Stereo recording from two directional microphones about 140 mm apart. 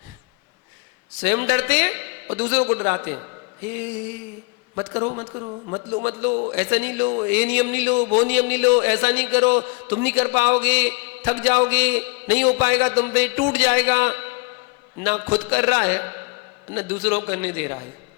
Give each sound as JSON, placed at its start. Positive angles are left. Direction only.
{"t": 1.2, "sound": "speech", "side_deg": -20}
{"t": 4.7, "sound": "a man's voice", "side_deg": -40}
{"t": 6.1, "sound": "speech", "side_deg": -20}